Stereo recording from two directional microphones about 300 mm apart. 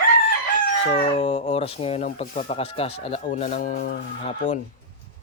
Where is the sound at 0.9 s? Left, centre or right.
Centre.